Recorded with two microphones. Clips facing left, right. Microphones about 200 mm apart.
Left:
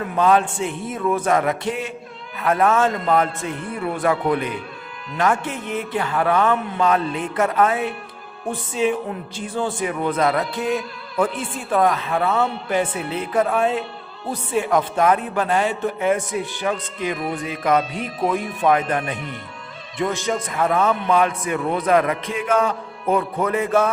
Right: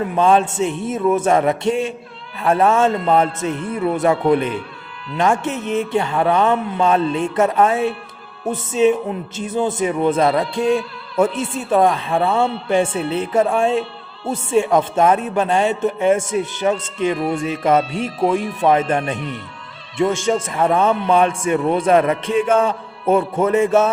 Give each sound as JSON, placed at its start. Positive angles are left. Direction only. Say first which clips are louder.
{"t": 0.0, "sound": "speech", "louder": "right 2 dB", "side_deg": -25}
{"t": 20.2, "sound": "speech", "louder": "right 4 dB", "side_deg": -30}